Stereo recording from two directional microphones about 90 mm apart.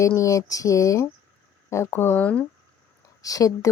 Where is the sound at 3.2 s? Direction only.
40° left (ahead or behind).